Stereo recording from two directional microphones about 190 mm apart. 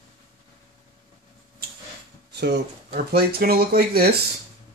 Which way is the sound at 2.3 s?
60° right (ahead or behind).